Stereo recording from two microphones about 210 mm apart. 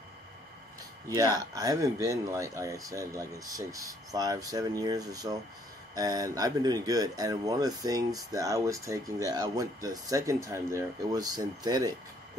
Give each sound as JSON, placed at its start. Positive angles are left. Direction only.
{"t": 1.0, "sound": "speech", "side_deg": -15}